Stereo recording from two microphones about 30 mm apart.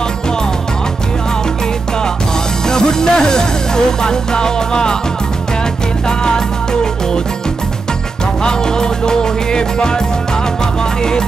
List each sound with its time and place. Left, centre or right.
2.7 s music: left
6.0 s music: left
8.5 s music: left